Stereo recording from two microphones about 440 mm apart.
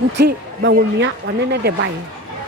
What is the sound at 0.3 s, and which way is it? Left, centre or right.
Speech, right.